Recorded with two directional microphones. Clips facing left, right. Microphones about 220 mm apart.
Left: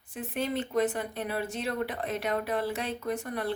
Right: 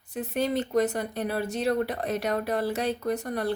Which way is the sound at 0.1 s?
40° right (ahead or behind).